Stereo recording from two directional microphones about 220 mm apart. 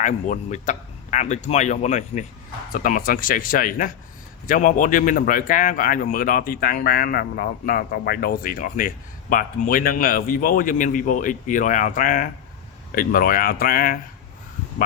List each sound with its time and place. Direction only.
0.0 s a man's voice: 35° left (ahead or behind)